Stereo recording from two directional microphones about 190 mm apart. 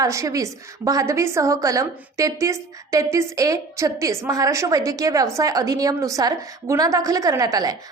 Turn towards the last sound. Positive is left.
turn(degrees=-20)  # may be behind; listen again after turning